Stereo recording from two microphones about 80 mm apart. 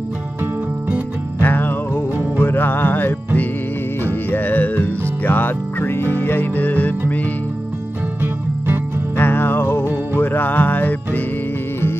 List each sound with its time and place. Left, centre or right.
1.4 s music: left
8.2 s music: right
9.1 s music: left